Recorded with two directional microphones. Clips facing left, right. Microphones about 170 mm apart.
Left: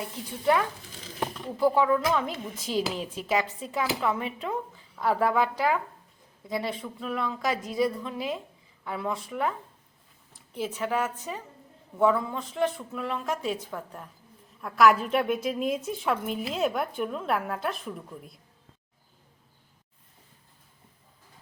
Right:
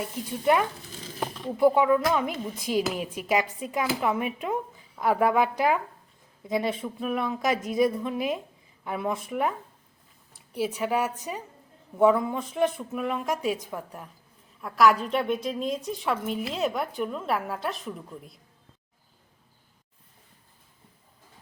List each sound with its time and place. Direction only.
1.5 s speech: 20° right (ahead or behind)
14.6 s a woman's voice: centre (ahead or behind)